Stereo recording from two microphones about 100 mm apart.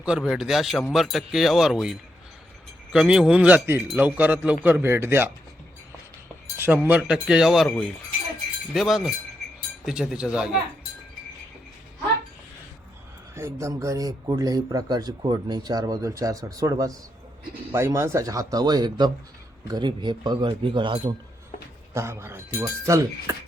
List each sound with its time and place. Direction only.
0.0 s speech: 5° right (ahead or behind); by 5.3 s 25° right (ahead or behind)
6.6 s speech: 20° right (ahead or behind)
8.7 s speech: centre (ahead or behind)
13.3 s speech: 30° right (ahead or behind); by 21.1 s 55° right (ahead or behind)
21.9 s speech: 25° right (ahead or behind)